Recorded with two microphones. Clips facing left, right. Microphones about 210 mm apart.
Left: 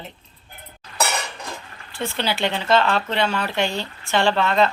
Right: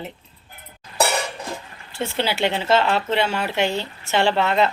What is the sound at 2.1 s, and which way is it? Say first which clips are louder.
Speech: right 2 dB; 10° right (ahead or behind).